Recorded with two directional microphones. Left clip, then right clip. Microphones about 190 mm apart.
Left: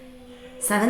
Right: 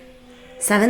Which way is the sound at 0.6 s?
25° right (ahead or behind).